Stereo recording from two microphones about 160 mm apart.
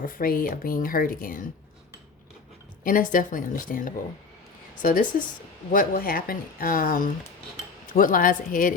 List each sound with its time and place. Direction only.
0.0 s speech: 60° left (ahead or behind)
2.8 s speech: 60° left (ahead or behind)